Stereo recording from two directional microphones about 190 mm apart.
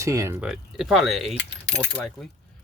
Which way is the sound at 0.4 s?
5° right (ahead or behind).